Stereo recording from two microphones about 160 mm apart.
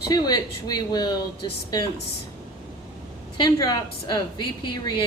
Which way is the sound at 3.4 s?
25° left (ahead or behind).